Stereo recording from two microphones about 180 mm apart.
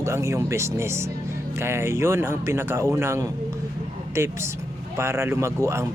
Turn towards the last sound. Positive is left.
turn(degrees=-15)  # may be behind; listen again after turning